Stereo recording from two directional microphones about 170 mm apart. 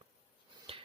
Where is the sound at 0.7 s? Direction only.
30° right (ahead or behind).